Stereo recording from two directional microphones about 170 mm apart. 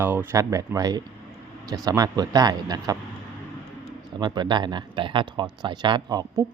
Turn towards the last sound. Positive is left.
turn(degrees=-20)  # may be behind; listen again after turning